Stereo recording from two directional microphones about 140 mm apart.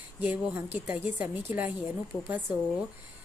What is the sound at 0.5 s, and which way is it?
A woman's voice, 10° right (ahead or behind).